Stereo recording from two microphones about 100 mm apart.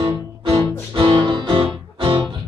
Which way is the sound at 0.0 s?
55° right (ahead or behind).